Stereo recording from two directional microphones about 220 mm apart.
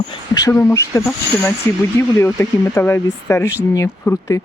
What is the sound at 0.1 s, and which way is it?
Speech, 15° left (ahead or behind).